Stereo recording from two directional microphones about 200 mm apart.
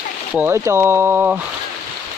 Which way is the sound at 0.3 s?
10° right (ahead or behind).